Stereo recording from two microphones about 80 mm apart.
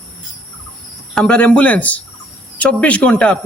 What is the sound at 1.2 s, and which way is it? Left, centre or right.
A man's voice, centre.